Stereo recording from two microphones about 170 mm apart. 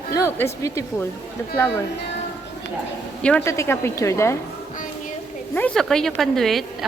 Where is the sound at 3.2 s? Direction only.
5° left (ahead or behind).